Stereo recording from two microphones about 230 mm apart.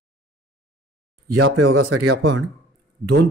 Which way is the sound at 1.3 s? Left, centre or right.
Right.